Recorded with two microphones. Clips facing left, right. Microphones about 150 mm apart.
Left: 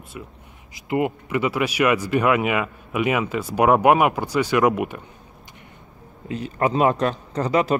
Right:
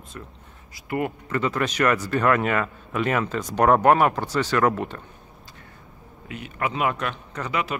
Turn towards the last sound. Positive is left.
turn(degrees=35)  # may be behind; listen again after turning